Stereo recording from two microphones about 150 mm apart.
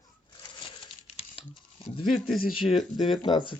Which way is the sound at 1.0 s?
40° left (ahead or behind).